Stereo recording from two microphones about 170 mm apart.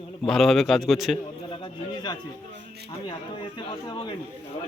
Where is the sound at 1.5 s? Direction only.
25° left (ahead or behind).